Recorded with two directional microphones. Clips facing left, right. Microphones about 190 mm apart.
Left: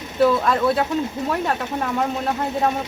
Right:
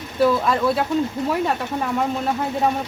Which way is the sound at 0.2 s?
Centre (ahead or behind).